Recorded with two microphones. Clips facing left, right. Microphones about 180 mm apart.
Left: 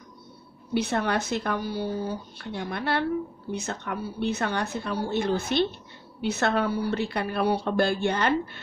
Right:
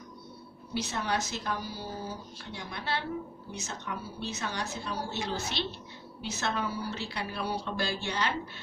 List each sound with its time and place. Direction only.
0.7 s speech: 60° left (ahead or behind)